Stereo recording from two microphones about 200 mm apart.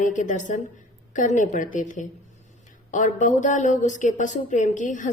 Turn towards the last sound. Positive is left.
turn(degrees=40)  # may be behind; listen again after turning